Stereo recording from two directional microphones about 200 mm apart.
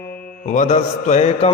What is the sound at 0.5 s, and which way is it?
Mantra, 35° left (ahead or behind).